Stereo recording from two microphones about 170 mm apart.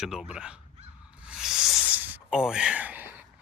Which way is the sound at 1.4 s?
5° right (ahead or behind).